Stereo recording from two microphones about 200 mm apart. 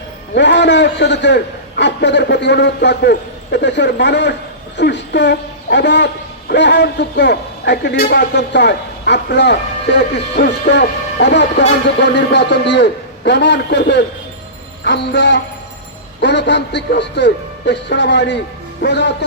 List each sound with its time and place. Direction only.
0.3 s a man's voice: 60° left (ahead or behind)